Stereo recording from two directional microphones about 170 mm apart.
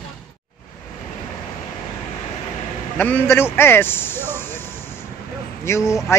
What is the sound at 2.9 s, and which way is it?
Speech, 10° left (ahead or behind).